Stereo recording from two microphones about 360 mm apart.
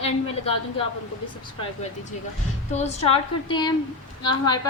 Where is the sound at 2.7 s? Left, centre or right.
Centre.